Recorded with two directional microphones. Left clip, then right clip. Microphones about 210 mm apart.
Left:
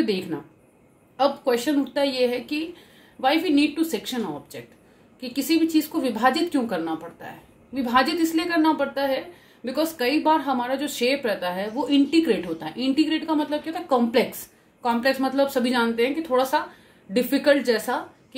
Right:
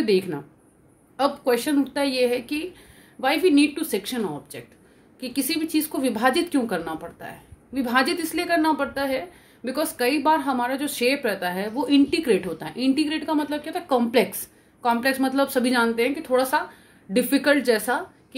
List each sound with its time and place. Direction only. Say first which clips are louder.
0.0 s a woman's voice: right 3 dB; 35° right (ahead or behind)